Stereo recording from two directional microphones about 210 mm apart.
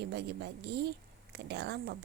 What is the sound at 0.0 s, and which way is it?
Speech, 55° right (ahead or behind).